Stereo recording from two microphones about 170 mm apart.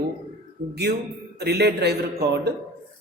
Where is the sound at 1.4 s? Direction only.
70° right (ahead or behind).